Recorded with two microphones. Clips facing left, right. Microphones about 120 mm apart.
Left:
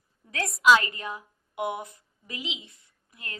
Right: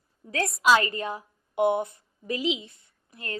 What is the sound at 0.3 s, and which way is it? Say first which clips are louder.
A woman's voice: left 1 dB; 35° right (ahead or behind).